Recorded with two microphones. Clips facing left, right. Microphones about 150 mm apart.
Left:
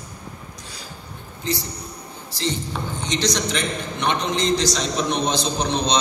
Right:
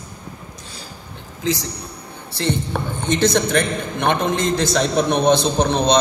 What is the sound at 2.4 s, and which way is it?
A woman's voice, 60° right (ahead or behind).